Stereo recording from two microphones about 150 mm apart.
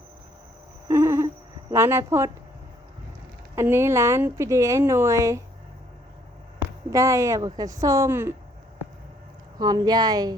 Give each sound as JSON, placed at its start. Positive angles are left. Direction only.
{"t": 0.9, "sound": "a sound", "side_deg": -20}
{"t": 1.7, "sound": "a woman's voice", "side_deg": -15}
{"t": 3.5, "sound": "a woman's voice", "side_deg": -15}
{"t": 6.9, "sound": "a woman's voice", "side_deg": -20}
{"t": 9.6, "sound": "a woman's voice", "side_deg": -25}